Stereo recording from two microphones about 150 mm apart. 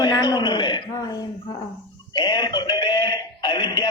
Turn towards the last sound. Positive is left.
turn(degrees=30)  # may be behind; listen again after turning